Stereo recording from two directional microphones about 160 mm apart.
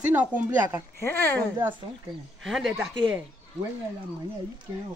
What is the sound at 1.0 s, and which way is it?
Speech, 15° left (ahead or behind).